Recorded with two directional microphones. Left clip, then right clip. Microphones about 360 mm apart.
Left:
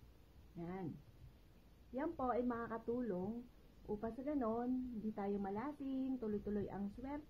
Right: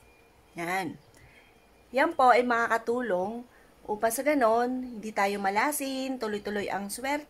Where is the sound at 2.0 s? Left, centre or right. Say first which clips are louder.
Right 19 dB; right.